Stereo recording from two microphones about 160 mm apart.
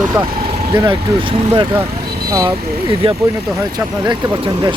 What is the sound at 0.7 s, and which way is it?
Speech, 30° right (ahead or behind).